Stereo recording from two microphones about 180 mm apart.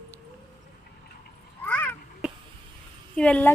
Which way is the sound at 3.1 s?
5° left (ahead or behind).